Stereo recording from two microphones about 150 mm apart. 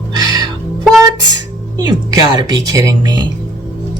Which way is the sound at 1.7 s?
30° right (ahead or behind).